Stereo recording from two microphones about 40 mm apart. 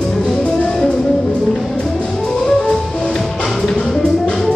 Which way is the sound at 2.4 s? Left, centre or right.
Centre.